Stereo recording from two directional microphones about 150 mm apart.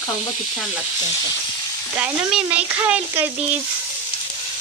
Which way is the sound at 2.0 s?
10° right (ahead or behind).